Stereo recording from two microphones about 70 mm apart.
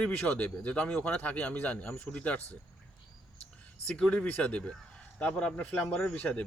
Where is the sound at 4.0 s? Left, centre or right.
Centre.